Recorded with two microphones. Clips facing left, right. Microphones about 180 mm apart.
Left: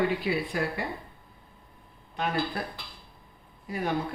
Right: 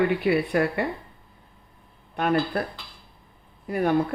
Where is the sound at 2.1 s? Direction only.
60° right (ahead or behind).